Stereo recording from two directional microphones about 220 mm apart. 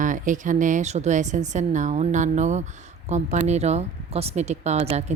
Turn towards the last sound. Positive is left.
turn(degrees=-30)  # may be behind; listen again after turning